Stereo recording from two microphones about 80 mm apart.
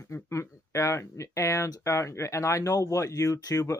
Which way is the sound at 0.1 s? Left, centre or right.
Left.